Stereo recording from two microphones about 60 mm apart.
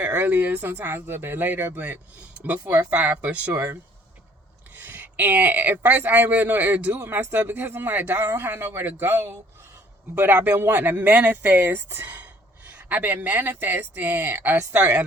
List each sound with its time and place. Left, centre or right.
0.0 s speech: right
10.2 s speech: right
12.0 s a sound: right
12.7 s speech: right